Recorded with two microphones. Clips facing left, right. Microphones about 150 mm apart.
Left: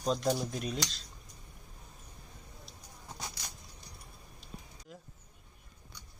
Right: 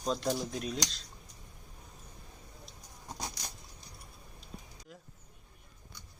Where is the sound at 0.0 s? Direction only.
Centre (ahead or behind).